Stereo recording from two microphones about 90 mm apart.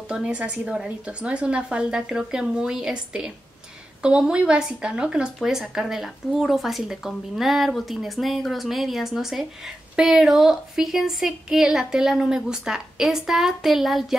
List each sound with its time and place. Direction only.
0.1 s a woman's voice: 10° right (ahead or behind)